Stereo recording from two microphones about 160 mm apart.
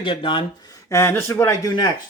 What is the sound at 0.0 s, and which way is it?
Cutlery, 30° left (ahead or behind).